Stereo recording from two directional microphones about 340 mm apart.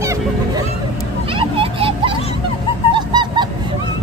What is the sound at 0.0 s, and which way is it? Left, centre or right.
Honk, centre.